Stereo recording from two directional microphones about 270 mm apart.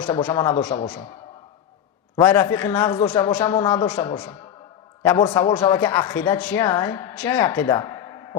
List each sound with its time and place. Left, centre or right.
0.0 s speech: centre
2.1 s speech: centre